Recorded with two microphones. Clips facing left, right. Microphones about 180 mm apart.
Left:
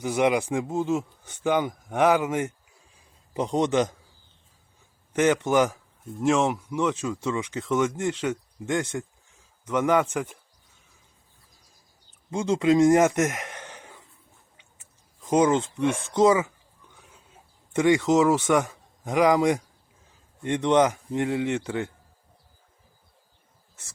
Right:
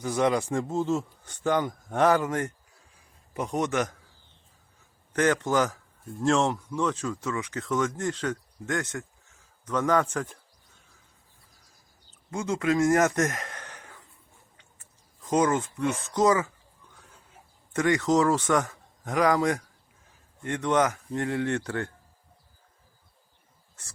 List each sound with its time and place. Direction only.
0.0 s speech: 15° left (ahead or behind)
2.9 s a sound: 25° left (ahead or behind)
5.1 s speech: 20° left (ahead or behind)
12.3 s speech: 25° left (ahead or behind)
15.2 s speech: 20° left (ahead or behind)
16.9 s a sound: 15° left (ahead or behind)
20.4 s speech: 20° left (ahead or behind)